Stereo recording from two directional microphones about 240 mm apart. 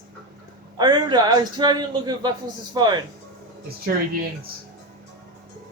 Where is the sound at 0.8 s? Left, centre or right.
Centre.